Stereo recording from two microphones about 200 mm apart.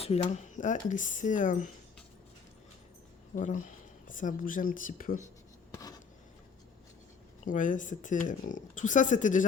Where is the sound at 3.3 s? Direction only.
40° left (ahead or behind).